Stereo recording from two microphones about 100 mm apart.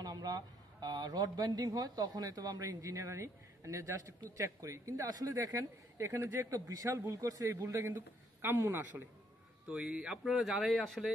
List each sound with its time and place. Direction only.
0.0 s a man's voice: 40° right (ahead or behind); by 9.0 s 20° right (ahead or behind)
9.7 s speech: 10° right (ahead or behind)